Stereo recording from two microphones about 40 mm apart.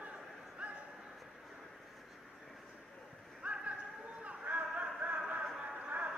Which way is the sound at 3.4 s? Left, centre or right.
Right.